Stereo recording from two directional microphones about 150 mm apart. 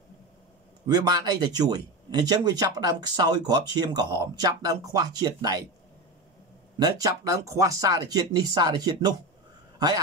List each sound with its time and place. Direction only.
0.8 s speech: 25° right (ahead or behind)
6.8 s speech: 25° right (ahead or behind)